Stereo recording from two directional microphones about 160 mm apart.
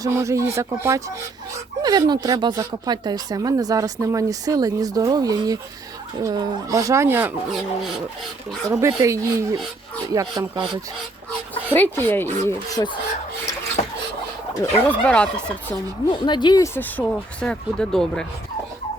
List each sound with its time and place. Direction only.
0.0 s speech: 20° right (ahead or behind)
8.7 s speech: 20° right (ahead or behind)
11.7 s speech: 10° left (ahead or behind)
14.6 s speech: 10° left (ahead or behind)
16.2 s speech: 30° left (ahead or behind)
16.7 s speech: 10° left (ahead or behind)